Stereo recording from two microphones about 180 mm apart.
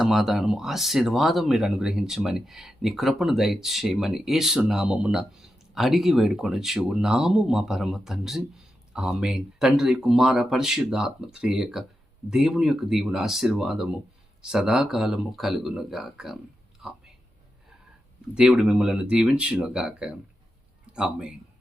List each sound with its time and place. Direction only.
0.0 s speech: centre (ahead or behind)
18.3 s speech: 5° right (ahead or behind)